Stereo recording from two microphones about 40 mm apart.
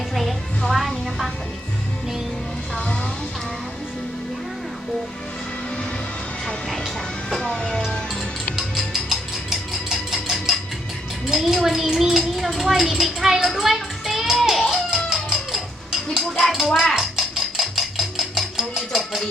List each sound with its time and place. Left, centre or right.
0.1 s music: centre
2.7 s a sound: left
7.3 s music: centre
7.5 s music: left
8.5 s music: centre
11.3 s a child's voice: centre
12.1 s a sound: centre
16.5 s speech: centre
17.0 s a sound: centre